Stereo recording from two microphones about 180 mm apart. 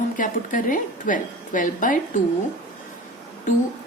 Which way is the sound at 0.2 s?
45° left (ahead or behind).